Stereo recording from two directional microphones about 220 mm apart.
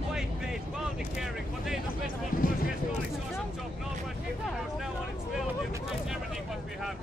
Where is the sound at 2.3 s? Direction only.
40° left (ahead or behind).